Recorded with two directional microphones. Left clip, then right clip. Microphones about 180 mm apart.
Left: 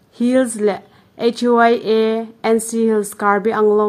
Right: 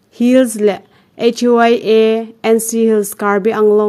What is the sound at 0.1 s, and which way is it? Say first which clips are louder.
Speech: right 5 dB; 35° right (ahead or behind).